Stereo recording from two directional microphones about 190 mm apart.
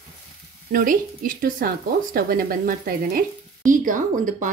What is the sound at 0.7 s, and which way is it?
A woman's voice, 45° right (ahead or behind).